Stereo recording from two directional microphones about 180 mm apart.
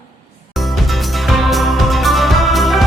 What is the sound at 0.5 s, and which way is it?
Music, centre (ahead or behind).